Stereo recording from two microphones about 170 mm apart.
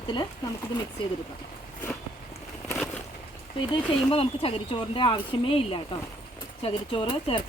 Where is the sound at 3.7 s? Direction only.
35° left (ahead or behind).